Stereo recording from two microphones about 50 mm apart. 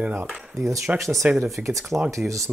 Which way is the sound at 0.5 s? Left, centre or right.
Right.